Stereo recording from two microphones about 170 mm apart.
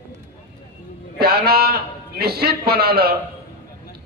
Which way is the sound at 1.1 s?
65° right (ahead or behind).